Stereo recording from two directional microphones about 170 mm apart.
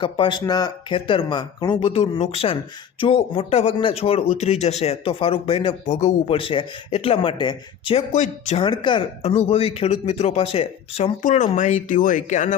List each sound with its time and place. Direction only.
0.0 s speech: 30° left (ahead or behind)
8.1 s speech: 45° left (ahead or behind)
8.6 s speech: 25° left (ahead or behind); by 12.5 s 45° left (ahead or behind)